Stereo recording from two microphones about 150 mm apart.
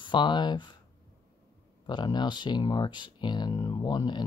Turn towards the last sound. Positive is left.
turn(degrees=30)  # may be behind; listen again after turning